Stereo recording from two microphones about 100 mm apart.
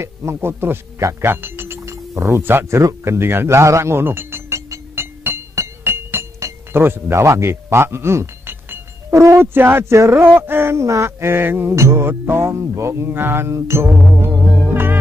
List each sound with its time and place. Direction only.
0.0 s speech: 25° right (ahead or behind)